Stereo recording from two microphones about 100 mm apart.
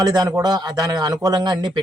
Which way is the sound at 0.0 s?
40° right (ahead or behind).